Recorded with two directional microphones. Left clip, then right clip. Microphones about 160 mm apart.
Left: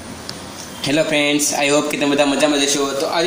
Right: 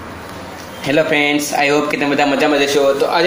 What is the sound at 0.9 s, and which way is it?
A man's voice, 15° left (ahead or behind).